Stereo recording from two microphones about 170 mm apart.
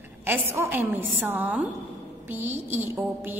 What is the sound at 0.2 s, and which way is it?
A woman's voice, 15° right (ahead or behind).